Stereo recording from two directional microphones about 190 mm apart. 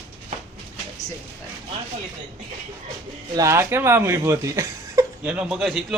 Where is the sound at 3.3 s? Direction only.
15° right (ahead or behind).